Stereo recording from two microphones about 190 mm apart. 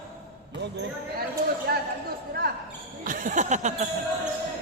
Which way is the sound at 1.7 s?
50° right (ahead or behind).